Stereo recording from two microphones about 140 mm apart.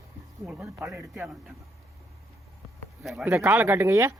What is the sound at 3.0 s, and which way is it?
Speech, 5° right (ahead or behind).